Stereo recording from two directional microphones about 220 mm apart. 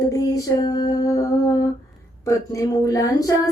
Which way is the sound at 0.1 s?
15° left (ahead or behind).